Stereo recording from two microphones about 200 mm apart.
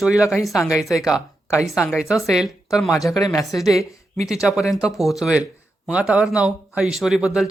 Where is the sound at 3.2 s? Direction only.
15° left (ahead or behind).